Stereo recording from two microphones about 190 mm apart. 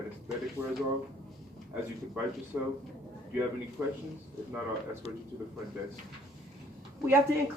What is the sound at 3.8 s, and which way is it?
Speech, 5° right (ahead or behind).